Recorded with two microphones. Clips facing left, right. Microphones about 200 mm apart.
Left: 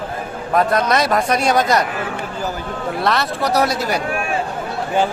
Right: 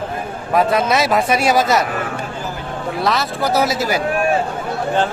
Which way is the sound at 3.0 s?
Centre (ahead or behind).